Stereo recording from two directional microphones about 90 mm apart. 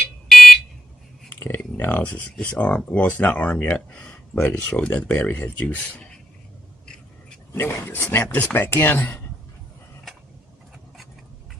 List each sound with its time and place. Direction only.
1.3 s speech: 25° left (ahead or behind)
7.5 s speech: 25° left (ahead or behind)